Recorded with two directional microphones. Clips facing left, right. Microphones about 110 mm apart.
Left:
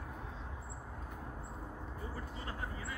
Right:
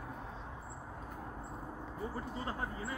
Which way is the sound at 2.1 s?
30° right (ahead or behind).